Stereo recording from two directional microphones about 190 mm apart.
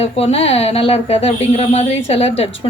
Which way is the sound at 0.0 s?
30° left (ahead or behind).